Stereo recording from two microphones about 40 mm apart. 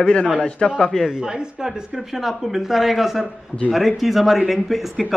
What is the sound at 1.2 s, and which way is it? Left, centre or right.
Speech, centre.